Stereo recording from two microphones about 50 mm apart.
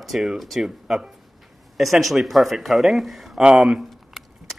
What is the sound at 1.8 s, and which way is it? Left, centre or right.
Speech, centre.